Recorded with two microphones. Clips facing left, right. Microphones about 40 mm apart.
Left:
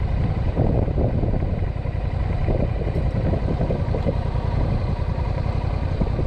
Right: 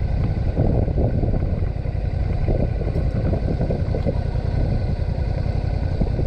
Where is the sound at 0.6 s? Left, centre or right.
Centre.